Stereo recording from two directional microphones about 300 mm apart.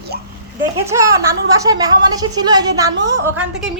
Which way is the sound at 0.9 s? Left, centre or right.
Centre.